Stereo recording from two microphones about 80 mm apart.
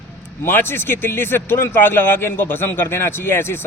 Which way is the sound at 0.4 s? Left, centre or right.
Left.